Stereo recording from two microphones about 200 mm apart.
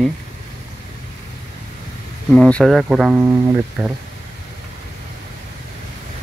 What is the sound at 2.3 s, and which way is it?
Speech, 5° left (ahead or behind).